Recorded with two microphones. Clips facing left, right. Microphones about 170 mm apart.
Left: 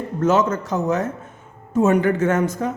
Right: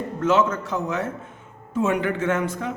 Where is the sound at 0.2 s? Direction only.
40° left (ahead or behind).